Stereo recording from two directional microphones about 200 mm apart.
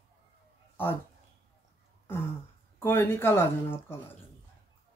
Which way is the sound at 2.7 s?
10° left (ahead or behind).